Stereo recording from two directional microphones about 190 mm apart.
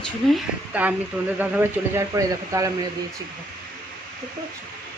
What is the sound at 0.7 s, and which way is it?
Speech, 10° right (ahead or behind).